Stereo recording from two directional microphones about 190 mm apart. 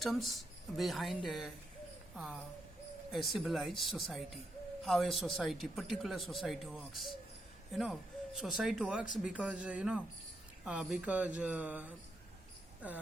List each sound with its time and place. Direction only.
0.0 s speech: centre (ahead or behind)